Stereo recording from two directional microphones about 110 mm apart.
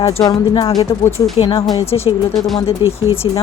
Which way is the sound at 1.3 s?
55° left (ahead or behind).